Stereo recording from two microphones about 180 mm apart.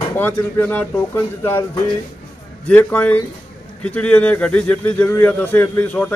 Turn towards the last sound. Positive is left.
turn(degrees=10)  # may be behind; listen again after turning